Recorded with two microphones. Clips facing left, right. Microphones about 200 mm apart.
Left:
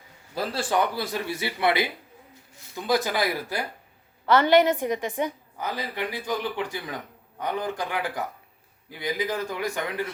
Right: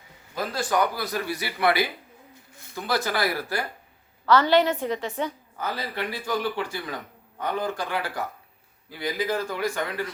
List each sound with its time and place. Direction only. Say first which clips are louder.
0.3 s a man's voice: even; 30° left (ahead or behind)